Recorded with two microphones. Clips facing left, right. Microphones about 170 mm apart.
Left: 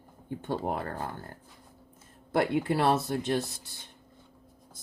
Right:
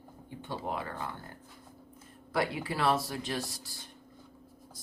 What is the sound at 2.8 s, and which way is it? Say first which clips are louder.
Speech: even; 45° left (ahead or behind).